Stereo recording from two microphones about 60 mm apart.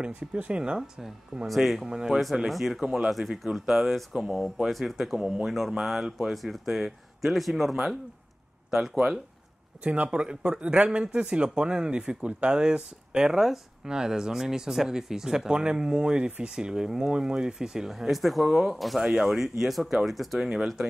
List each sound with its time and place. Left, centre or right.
0.0 s speech: centre
4.6 s speech: centre
8.6 s a sound: centre
9.8 s speech: centre